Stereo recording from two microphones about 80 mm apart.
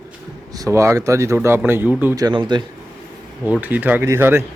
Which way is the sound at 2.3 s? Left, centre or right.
Right.